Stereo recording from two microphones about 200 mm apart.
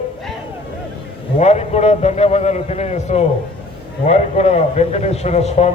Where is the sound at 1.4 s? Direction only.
35° left (ahead or behind).